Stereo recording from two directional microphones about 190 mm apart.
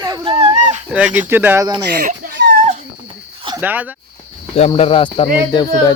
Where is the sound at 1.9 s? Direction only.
50° right (ahead or behind).